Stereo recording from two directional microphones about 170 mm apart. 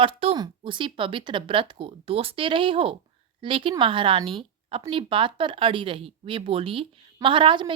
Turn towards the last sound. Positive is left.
turn(degrees=-30)  # may be behind; listen again after turning